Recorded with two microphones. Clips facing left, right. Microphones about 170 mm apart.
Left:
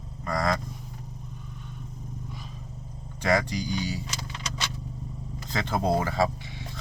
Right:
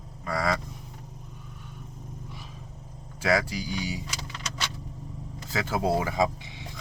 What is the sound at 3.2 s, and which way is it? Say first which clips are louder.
Speech: left 1 dB; 5° right (ahead or behind).